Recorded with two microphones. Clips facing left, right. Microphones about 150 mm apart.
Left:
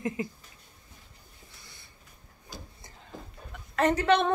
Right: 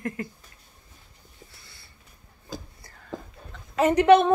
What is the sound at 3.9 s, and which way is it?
Speech, 15° right (ahead or behind).